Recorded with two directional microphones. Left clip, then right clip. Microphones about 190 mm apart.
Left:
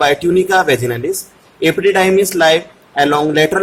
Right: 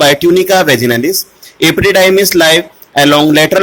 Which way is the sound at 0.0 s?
25° right (ahead or behind).